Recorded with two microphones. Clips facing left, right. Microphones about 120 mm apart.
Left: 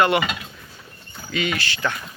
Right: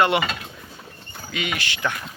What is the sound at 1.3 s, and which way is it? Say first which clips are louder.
Speech: left 3 dB; 10° right (ahead or behind).